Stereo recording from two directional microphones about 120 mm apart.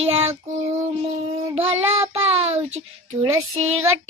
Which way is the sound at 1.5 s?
55° right (ahead or behind).